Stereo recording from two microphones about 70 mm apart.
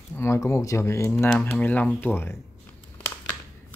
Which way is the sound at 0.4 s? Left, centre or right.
Left.